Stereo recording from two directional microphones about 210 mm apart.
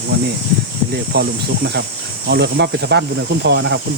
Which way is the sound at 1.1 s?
50° right (ahead or behind).